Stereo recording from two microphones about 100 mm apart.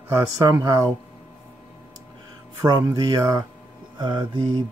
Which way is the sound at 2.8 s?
35° right (ahead or behind).